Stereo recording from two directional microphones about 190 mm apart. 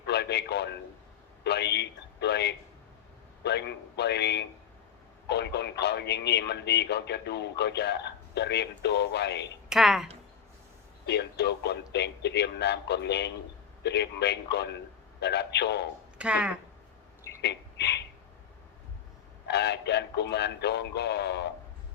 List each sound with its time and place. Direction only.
0.0 s a sound: 60° left (ahead or behind)
1.5 s speech: 60° left (ahead or behind)
9.6 s speech: centre (ahead or behind)
11.0 s speech: 60° left (ahead or behind)
16.1 s speech: 5° right (ahead or behind)
17.4 s a sound: 60° left (ahead or behind)
19.5 s speech: 60° left (ahead or behind)